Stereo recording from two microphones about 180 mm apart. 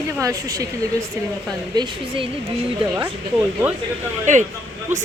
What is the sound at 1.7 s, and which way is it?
Speech, 25° right (ahead or behind).